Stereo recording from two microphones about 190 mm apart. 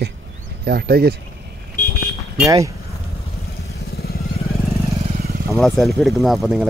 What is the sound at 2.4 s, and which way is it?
Speech, 15° right (ahead or behind).